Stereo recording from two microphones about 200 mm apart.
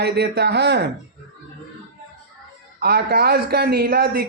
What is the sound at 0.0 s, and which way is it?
Speech, 55° right (ahead or behind).